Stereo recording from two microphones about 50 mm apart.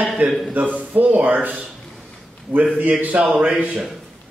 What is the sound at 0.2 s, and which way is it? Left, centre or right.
Speech, right.